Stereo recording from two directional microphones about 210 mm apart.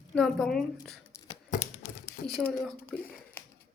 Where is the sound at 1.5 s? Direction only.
35° left (ahead or behind).